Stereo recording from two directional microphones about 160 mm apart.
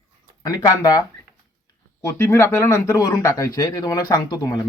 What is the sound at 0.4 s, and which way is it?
Speech, 25° left (ahead or behind).